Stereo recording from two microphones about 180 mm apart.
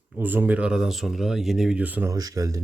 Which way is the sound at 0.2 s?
10° right (ahead or behind).